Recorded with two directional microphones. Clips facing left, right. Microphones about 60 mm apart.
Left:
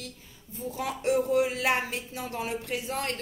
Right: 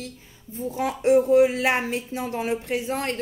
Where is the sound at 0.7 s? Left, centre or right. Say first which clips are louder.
Right 8 dB; right.